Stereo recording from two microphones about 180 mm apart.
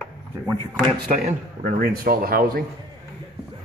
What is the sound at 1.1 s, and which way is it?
Speech, 50° right (ahead or behind).